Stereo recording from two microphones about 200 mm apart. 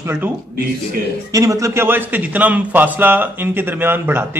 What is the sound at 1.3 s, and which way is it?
A man's voice, 15° right (ahead or behind).